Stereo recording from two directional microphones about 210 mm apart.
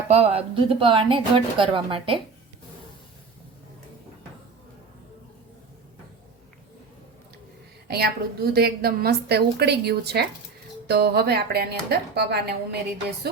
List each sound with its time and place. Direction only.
0.1 s a woman's voice: 30° right (ahead or behind)
7.9 s a woman's voice: 50° right (ahead or behind)